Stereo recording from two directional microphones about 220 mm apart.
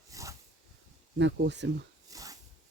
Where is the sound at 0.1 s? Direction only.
15° right (ahead or behind).